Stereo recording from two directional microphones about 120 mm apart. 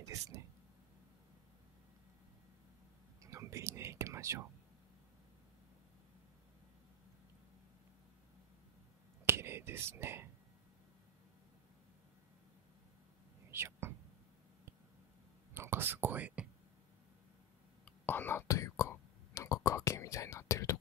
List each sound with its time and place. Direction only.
0.0 s a sound: 25° right (ahead or behind)
3.2 s whispering: 25° right (ahead or behind)
9.2 s whispering: 20° right (ahead or behind)
13.5 s whispering: 20° right (ahead or behind)
15.5 s whispering: 20° right (ahead or behind)
17.8 s whispering: 15° left (ahead or behind)